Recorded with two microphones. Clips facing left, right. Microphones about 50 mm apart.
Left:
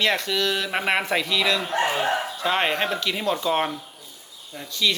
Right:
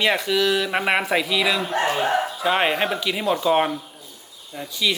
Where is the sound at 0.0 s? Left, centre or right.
Centre.